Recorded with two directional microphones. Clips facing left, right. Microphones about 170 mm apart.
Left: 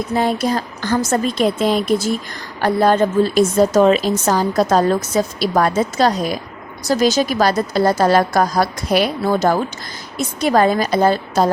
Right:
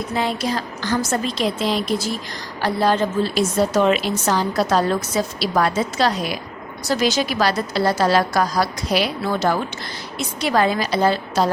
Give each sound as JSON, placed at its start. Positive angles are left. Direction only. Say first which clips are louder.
{"t": 0.1, "sound": "a woman's voice", "louder": "left 5 dB", "side_deg": 45}